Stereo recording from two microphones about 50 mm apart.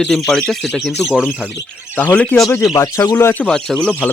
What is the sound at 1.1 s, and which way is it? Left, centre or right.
Speech, centre.